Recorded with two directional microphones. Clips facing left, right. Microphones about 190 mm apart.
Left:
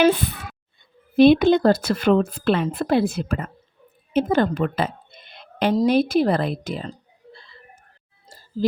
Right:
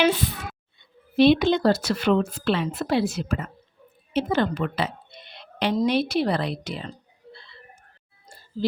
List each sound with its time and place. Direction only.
0.0 s speech: 55° left (ahead or behind)
4.1 s a sound: 50° left (ahead or behind)
5.7 s speech: 45° left (ahead or behind)
8.6 s speech: 45° left (ahead or behind)